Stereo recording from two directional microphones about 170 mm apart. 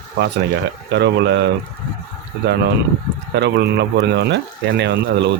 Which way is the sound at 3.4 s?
90° right.